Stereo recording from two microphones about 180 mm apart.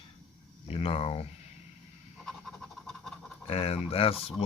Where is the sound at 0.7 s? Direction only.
30° left (ahead or behind).